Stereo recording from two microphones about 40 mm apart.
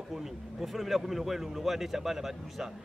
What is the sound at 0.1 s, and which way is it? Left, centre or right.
A man's voice, centre.